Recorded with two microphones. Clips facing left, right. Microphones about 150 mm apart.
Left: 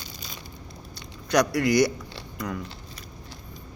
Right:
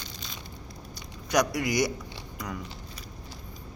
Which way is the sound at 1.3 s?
15° right (ahead or behind).